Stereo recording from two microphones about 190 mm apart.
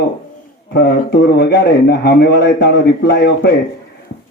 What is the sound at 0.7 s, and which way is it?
Speech, 60° left (ahead or behind).